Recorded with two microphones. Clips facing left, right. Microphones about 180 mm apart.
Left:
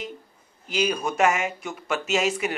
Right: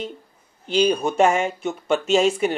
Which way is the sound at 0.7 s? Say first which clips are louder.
Right 6 dB; 30° right (ahead or behind).